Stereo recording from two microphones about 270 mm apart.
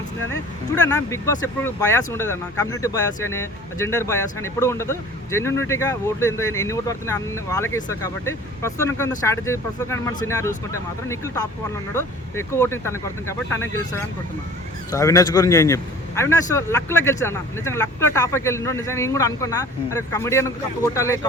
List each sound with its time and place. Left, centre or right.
0.9 s speech: centre